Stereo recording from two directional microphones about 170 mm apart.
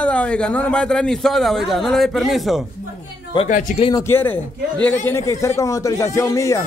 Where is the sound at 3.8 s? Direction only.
20° left (ahead or behind).